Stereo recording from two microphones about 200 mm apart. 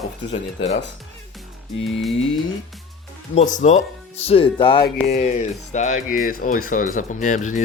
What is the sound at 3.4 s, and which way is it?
Speech, 35° left (ahead or behind).